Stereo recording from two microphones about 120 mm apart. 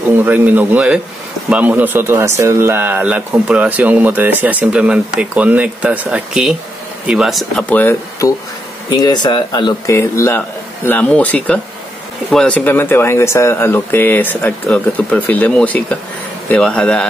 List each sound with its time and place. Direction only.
0.1 s speech: 15° right (ahead or behind)
8.2 s speech: 30° left (ahead or behind)
9.8 s speech: 25° left (ahead or behind)
10.9 s speech: 10° left (ahead or behind)
12.5 s speech: 15° left (ahead or behind)